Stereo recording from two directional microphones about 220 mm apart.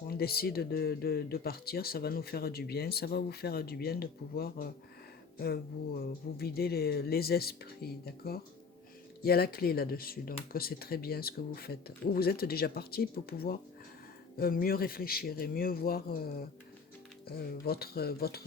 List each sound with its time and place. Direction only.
0.1 s speech: 45° left (ahead or behind)